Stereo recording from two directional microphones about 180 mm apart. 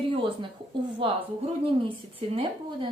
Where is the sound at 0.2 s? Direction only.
25° right (ahead or behind).